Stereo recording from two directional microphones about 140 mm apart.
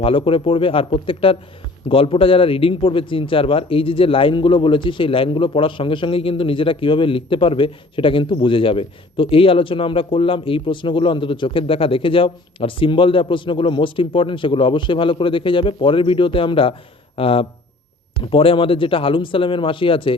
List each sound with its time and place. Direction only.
0.0 s speech: 40° left (ahead or behind)